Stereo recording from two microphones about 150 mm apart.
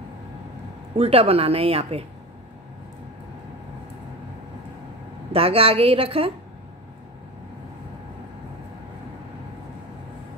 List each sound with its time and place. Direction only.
0.9 s speech: 40° right (ahead or behind)
5.3 s speech: 40° right (ahead or behind)